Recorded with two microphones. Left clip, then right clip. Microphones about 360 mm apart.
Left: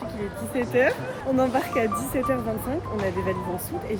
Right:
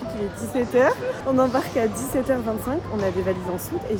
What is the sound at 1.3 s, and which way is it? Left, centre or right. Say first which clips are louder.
Speech: right 1 dB; centre.